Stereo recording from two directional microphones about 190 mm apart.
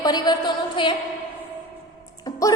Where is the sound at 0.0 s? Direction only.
20° left (ahead or behind).